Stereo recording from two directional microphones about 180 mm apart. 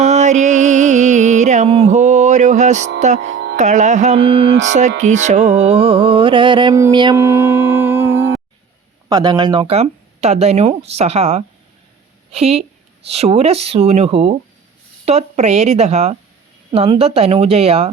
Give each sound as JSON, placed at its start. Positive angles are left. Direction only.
{"t": 0.0, "sound": "music", "side_deg": -40}
{"t": 3.0, "sound": "speech", "side_deg": -40}
{"t": 3.3, "sound": "music", "side_deg": -70}
{"t": 3.6, "sound": "speech", "side_deg": -40}
{"t": 4.6, "sound": "music", "side_deg": -40}
{"t": 9.0, "sound": "speech", "side_deg": -20}